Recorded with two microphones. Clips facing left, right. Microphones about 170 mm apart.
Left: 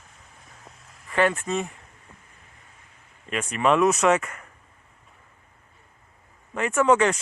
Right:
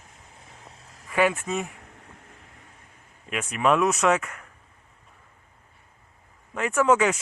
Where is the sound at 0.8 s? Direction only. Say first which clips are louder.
Right 2 dB; 35° right (ahead or behind).